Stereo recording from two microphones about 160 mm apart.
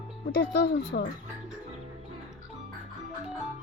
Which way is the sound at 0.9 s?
75° left (ahead or behind).